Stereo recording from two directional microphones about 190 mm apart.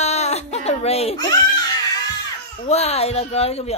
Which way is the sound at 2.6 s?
35° left (ahead or behind).